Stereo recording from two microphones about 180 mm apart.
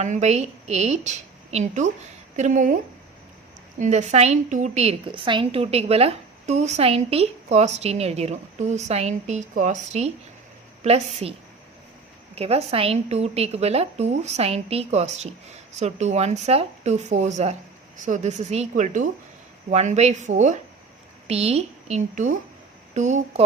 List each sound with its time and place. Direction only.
0.0 s a woman's voice: 40° right (ahead or behind)
3.8 s a woman's voice: 40° right (ahead or behind)